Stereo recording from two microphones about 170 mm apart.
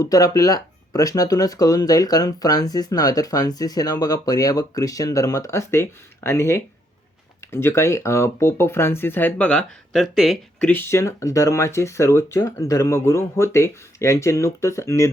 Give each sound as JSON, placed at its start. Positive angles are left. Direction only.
{"t": 0.0, "sound": "speech", "side_deg": 20}
{"t": 10.8, "sound": "speech", "side_deg": 15}